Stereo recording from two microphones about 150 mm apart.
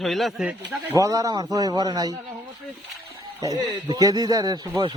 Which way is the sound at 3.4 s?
25° right (ahead or behind).